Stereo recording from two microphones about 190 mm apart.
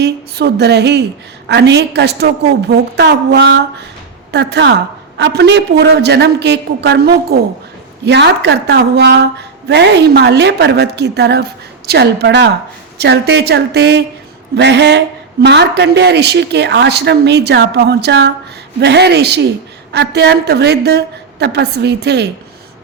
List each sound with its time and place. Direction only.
0.0 s speech: 60° right (ahead or behind)